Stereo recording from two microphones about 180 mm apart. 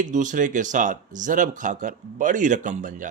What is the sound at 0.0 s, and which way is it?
Speech, 45° right (ahead or behind).